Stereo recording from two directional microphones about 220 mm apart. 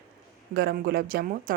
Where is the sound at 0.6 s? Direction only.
45° right (ahead or behind).